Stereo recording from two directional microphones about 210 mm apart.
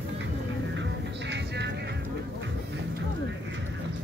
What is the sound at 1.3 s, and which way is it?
Music, 55° right (ahead or behind).